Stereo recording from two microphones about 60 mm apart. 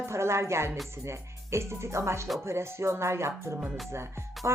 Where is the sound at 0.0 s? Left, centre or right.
Right.